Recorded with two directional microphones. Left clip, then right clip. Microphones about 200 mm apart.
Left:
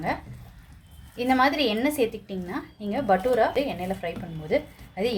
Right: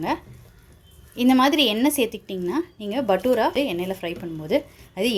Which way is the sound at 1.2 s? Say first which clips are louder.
Right 3 dB; 45° right (ahead or behind).